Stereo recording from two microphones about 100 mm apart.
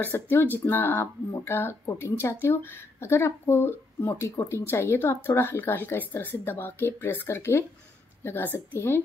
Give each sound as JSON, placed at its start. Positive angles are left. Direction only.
{"t": 0.0, "sound": "speech", "side_deg": 20}